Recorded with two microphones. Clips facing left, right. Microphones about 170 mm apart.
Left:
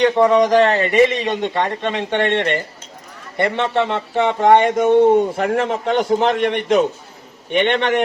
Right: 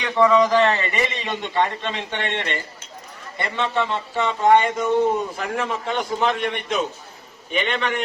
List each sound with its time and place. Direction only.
0.3 s speech: 55° left (ahead or behind)